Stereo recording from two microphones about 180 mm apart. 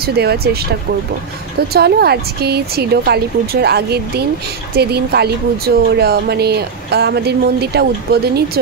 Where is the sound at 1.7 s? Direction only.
60° right (ahead or behind).